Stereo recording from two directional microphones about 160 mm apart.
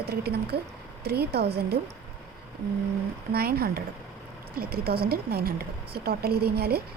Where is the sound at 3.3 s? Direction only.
75° right (ahead or behind).